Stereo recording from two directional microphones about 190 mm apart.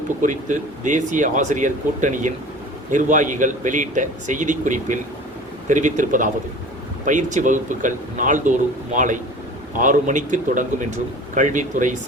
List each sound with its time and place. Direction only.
0.2 s speech: 40° right (ahead or behind)